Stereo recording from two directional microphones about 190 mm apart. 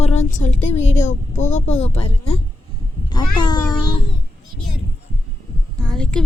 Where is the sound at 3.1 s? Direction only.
20° left (ahead or behind).